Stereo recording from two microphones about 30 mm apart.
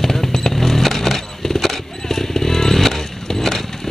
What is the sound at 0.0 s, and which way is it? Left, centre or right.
Vehicle, centre.